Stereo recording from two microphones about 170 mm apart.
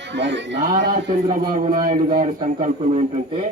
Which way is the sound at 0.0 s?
90° right.